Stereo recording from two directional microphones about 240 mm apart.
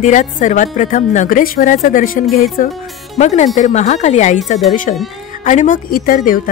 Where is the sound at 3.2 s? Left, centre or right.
Left.